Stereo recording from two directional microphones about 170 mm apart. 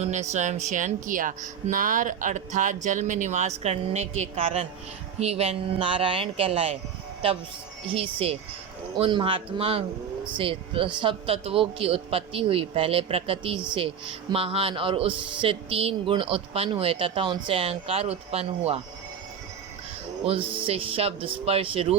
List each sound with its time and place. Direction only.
0.0 s speech: 45° right (ahead or behind)
7.9 s speech: 35° right (ahead or behind)
20.2 s speech: 30° right (ahead or behind)